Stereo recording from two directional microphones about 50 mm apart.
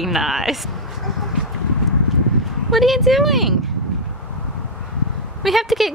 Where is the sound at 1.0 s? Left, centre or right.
Centre.